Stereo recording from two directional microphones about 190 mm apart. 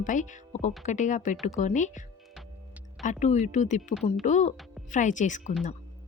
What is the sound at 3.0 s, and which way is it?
Speech, 40° left (ahead or behind).